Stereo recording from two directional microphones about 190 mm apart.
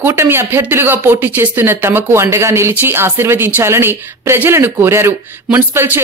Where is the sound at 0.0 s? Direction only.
15° right (ahead or behind).